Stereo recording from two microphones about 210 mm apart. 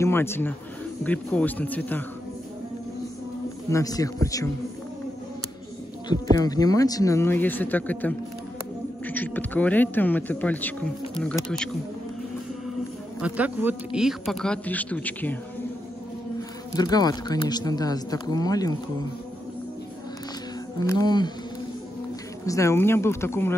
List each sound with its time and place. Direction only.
0.0 s a man's voice: 10° left (ahead or behind)
3.7 s a man's voice: 15° left (ahead or behind)
6.0 s a man's voice: 20° left (ahead or behind)
13.2 s speech: 10° right (ahead or behind)
16.7 s speech: 20° left (ahead or behind)
20.8 s speech: 15° left (ahead or behind)
22.5 s a man's voice: 15° left (ahead or behind)